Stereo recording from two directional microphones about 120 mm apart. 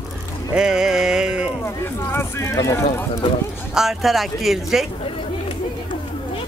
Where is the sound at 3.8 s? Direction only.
Centre (ahead or behind).